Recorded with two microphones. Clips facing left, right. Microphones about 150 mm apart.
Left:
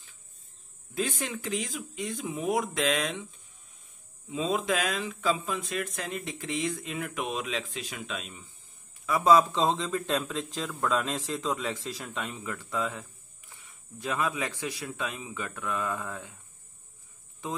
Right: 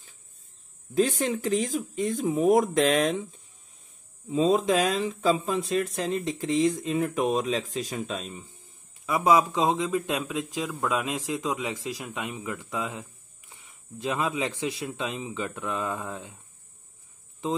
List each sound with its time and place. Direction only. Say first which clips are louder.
0.9 s speech: right 8 dB; 40° right (ahead or behind)
4.3 s speech: right 6 dB; 35° right (ahead or behind)
9.0 s speech: even; 15° right (ahead or behind)